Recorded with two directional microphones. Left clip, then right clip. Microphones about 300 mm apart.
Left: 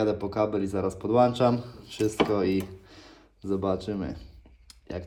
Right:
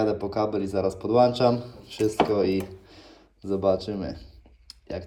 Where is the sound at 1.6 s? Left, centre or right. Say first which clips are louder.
Right 2 dB; centre.